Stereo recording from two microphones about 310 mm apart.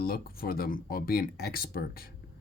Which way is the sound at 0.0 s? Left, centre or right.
Left.